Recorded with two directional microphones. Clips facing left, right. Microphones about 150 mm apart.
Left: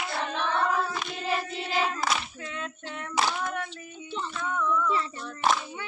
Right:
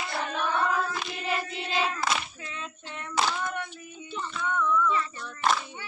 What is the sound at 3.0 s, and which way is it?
Child singing, 5° left (ahead or behind).